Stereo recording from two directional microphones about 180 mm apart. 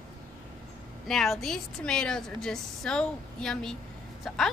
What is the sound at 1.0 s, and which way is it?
A woman's voice, centre (ahead or behind).